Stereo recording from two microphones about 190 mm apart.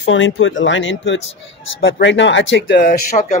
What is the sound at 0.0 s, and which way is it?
Speech, 80° left.